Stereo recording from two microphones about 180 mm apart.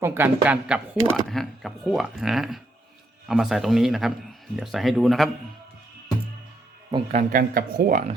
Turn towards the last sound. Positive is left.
turn(degrees=-50)  # may be behind; listen again after turning